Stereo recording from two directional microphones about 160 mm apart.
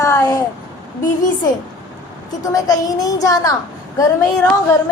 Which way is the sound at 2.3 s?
20° left (ahead or behind).